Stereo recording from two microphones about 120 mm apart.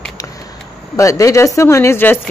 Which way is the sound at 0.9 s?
25° left (ahead or behind).